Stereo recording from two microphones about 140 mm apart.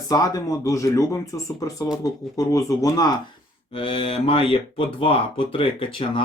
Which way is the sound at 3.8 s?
40° left (ahead or behind).